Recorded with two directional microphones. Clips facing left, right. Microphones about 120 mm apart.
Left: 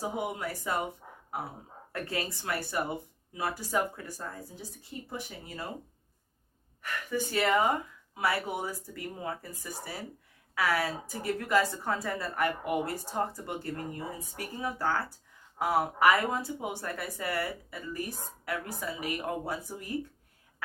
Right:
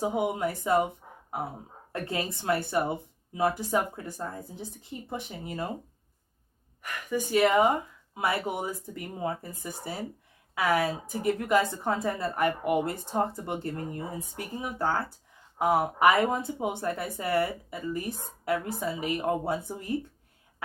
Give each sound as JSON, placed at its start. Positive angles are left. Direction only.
{"t": 0.0, "sound": "a woman's voice", "side_deg": -20}
{"t": 1.9, "sound": "a woman's voice", "side_deg": -25}
{"t": 6.8, "sound": "a woman's voice", "side_deg": -15}